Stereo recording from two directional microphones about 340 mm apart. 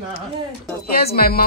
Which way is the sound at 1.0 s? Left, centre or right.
Left.